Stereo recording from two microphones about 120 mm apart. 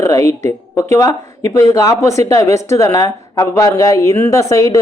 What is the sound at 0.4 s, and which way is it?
A woman's voice, 25° left (ahead or behind).